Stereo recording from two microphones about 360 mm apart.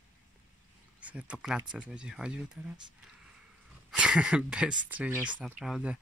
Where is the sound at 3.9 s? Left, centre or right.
Centre.